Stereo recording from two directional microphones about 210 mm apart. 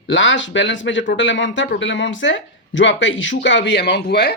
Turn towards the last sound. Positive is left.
turn(degrees=50)  # may be behind; listen again after turning